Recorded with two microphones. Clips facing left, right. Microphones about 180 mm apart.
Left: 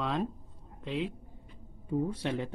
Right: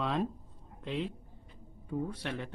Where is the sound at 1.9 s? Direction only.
20° left (ahead or behind).